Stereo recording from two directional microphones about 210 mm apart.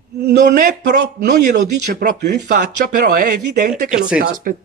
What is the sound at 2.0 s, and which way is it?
Speech, 50° right (ahead or behind).